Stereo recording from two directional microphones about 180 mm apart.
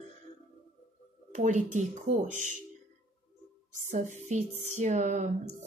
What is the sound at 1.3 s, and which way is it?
Speech, 40° right (ahead or behind).